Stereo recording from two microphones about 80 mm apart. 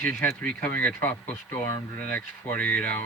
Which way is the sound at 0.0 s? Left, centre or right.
Left.